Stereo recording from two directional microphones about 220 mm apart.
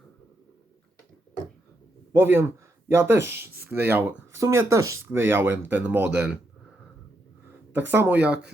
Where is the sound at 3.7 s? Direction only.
10° right (ahead or behind).